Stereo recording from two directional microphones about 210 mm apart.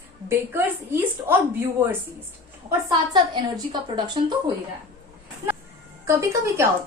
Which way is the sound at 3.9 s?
20° right (ahead or behind).